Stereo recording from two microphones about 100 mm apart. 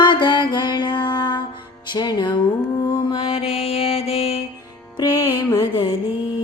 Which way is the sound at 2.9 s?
55° left (ahead or behind).